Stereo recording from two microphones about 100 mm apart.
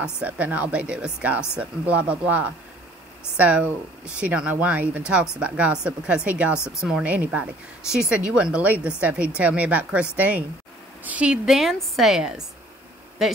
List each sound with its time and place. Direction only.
0.0 s a woman's voice: 15° right (ahead or behind)